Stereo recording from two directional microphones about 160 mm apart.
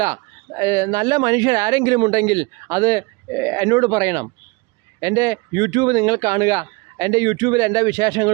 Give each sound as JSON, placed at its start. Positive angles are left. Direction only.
{"t": 0.0, "sound": "speech", "side_deg": -20}